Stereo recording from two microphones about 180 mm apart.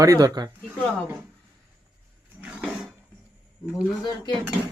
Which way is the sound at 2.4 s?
5° right (ahead or behind).